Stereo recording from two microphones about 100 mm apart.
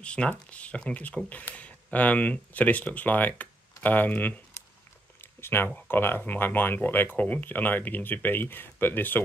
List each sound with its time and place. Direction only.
0.0 s speech: 10° left (ahead or behind)
5.2 s a sound: 20° left (ahead or behind)
5.9 s speech: 20° left (ahead or behind)